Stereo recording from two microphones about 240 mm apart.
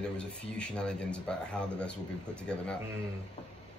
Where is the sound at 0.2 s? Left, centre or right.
Centre.